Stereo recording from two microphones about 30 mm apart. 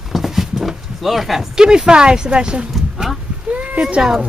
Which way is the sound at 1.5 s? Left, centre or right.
Right.